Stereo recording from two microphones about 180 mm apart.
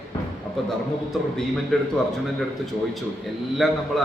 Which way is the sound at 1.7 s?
Centre (ahead or behind).